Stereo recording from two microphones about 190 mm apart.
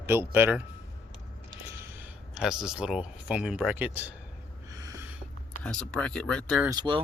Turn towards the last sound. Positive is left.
turn(degrees=-25)  # may be behind; listen again after turning